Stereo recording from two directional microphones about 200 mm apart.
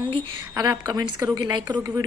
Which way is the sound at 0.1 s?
15° right (ahead or behind).